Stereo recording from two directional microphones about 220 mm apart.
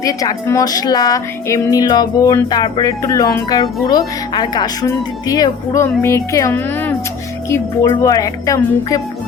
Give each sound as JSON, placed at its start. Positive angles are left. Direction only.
{"t": 0.0, "sound": "speech", "side_deg": 15}